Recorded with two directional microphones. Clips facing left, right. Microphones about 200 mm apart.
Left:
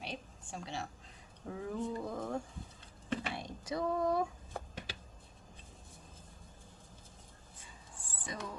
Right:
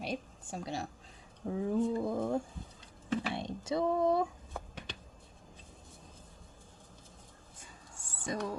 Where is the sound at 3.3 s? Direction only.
25° right (ahead or behind).